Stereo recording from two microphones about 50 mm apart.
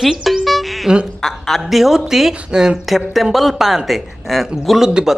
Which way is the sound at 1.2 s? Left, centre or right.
Centre.